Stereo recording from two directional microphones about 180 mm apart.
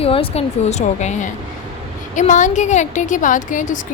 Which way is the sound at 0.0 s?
30° left (ahead or behind).